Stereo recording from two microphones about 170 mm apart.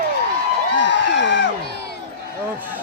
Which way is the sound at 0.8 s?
90° left.